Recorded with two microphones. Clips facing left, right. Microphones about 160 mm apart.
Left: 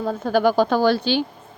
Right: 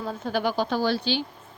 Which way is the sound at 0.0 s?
45° left (ahead or behind).